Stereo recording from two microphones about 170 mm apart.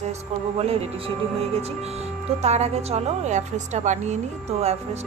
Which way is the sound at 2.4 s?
40° right (ahead or behind).